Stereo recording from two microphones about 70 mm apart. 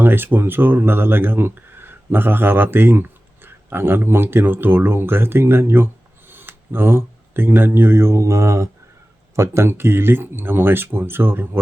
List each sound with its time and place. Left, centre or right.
0.0 s speech: right